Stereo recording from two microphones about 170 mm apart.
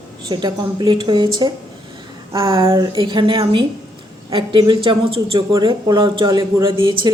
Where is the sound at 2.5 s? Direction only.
30° right (ahead or behind).